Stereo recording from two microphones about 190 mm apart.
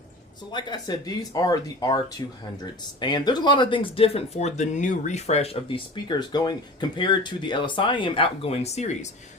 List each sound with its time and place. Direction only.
0.5 s speech: 20° left (ahead or behind); by 9.0 s 35° left (ahead or behind)